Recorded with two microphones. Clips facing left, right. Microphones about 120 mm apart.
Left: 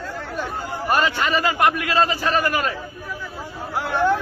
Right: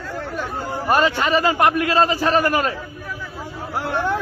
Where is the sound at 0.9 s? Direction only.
30° right (ahead or behind).